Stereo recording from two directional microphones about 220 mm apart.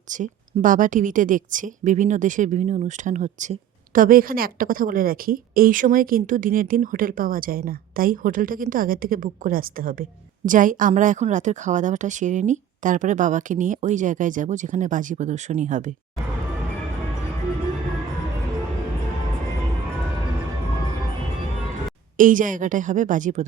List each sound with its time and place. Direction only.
0.1 s a woman's voice: 35° right (ahead or behind)
22.2 s a woman's voice: 35° right (ahead or behind)